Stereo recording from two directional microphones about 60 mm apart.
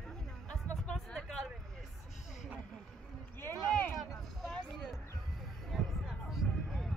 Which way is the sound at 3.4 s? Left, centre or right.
Left.